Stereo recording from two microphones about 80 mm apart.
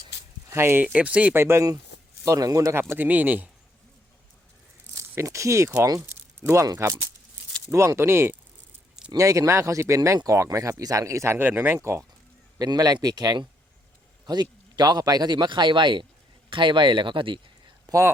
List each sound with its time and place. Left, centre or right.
0.5 s speech: right
0.9 s speech: centre
1.4 s speech: right
2.2 s speech: right
2.9 s speech: right
5.1 s speech: right
7.7 s speech: right
9.1 s speech: right
12.5 s a man's voice: right
17.9 s speech: right